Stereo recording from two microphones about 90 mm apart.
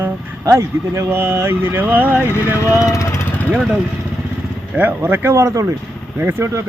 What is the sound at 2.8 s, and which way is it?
Speech, 35° left (ahead or behind).